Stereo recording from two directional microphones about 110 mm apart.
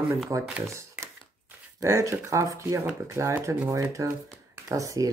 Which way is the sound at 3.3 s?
15° right (ahead or behind).